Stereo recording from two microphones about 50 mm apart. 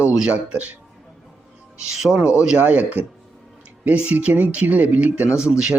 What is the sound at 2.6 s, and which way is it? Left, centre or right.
Speech, right.